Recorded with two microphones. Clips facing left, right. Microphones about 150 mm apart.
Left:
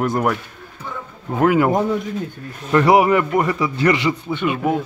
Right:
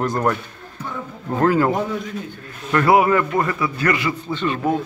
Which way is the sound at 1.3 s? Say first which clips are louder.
Left 2 dB; 15° left (ahead or behind).